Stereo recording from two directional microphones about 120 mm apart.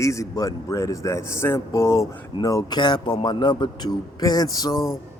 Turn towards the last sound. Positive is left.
turn(degrees=30)  # may be behind; listen again after turning